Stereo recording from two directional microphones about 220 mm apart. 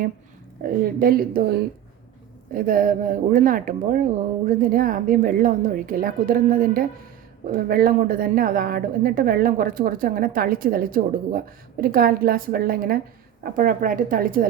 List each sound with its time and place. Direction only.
0.6 s a woman's voice: 40° right (ahead or behind)